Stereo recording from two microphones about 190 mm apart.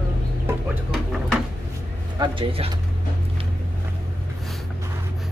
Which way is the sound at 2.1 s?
25° right (ahead or behind).